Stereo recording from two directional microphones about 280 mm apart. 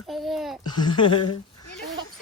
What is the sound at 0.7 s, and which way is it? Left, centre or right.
Speech, centre.